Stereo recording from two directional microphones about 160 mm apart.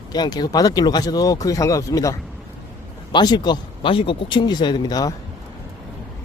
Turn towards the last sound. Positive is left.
turn(degrees=25)  # may be behind; listen again after turning